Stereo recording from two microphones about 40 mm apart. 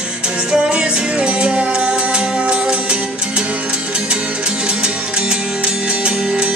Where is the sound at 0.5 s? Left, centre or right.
Right.